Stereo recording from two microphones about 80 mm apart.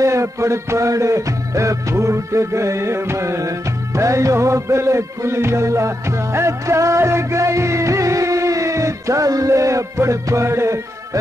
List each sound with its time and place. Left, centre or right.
0.0 s music: right